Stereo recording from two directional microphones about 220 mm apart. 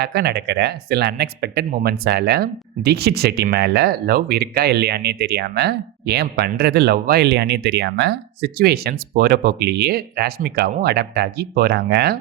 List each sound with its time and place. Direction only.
0.0 s speech: 50° right (ahead or behind)